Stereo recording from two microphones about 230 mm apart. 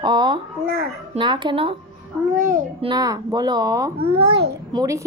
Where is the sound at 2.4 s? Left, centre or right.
Right.